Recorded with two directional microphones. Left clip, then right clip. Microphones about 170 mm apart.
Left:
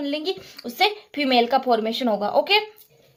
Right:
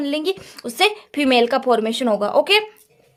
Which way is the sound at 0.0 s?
45° right (ahead or behind).